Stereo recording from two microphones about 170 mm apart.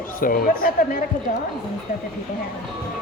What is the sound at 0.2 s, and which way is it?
Speech, 55° left (ahead or behind).